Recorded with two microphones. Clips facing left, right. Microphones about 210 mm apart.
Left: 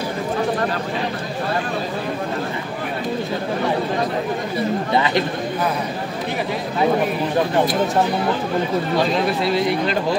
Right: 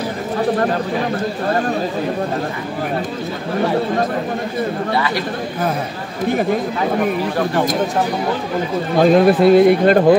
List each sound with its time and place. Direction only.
4.9 s speech: 20° left (ahead or behind)
9.0 s speech: 50° right (ahead or behind)